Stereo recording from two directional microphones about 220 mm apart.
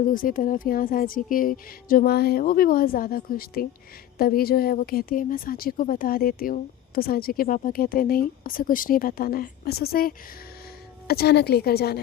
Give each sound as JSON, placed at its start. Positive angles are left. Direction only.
{"t": 0.0, "sound": "a woman's voice", "side_deg": 40}